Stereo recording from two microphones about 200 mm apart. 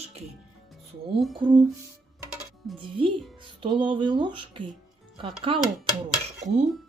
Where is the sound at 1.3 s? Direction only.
25° right (ahead or behind).